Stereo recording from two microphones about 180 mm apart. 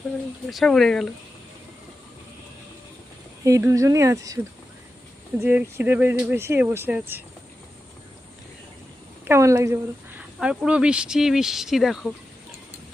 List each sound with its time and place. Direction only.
0.5 s speech: centre (ahead or behind)
3.4 s speech: 15° right (ahead or behind)
5.4 s speech: 10° right (ahead or behind)
9.2 s a woman's voice: 15° right (ahead or behind)
10.4 s speech: 5° right (ahead or behind)